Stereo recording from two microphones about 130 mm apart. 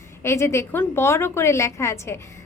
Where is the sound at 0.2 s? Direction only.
20° left (ahead or behind).